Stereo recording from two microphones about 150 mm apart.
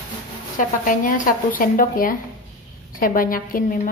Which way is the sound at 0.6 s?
60° left (ahead or behind).